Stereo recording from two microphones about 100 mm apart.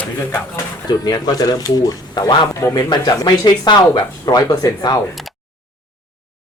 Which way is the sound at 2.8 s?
45° left (ahead or behind).